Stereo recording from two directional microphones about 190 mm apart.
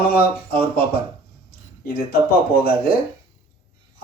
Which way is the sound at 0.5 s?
30° right (ahead or behind).